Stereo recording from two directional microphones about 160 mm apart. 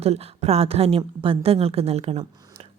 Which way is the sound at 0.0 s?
40° right (ahead or behind).